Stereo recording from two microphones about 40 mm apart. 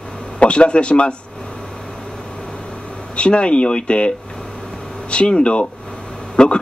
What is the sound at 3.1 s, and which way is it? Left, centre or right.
Speech, left.